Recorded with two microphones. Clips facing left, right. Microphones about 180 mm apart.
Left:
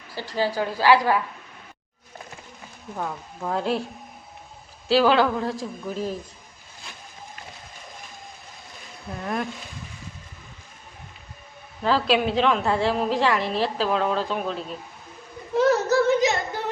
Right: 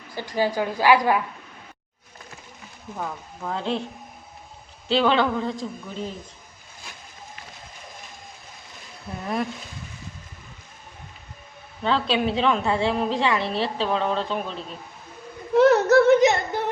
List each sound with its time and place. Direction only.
0.2 s a woman's voice: 15° right (ahead or behind)
3.0 s speech: 5° left (ahead or behind)
4.9 s a woman's voice: 5° left (ahead or behind)
9.2 s a woman's voice: centre (ahead or behind)
11.8 s a woman's voice: centre (ahead or behind)
15.5 s a sound: 65° right (ahead or behind)